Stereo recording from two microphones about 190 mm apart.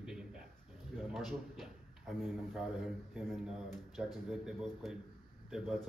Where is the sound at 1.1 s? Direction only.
Centre (ahead or behind).